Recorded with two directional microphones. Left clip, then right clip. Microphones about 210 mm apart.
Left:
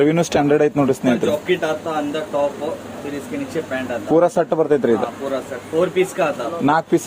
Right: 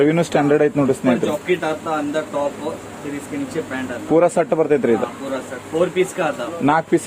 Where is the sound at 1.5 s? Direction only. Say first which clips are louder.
Even; 25° right (ahead or behind).